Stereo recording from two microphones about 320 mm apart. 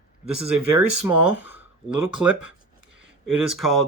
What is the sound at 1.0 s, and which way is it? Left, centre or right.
Speech, centre.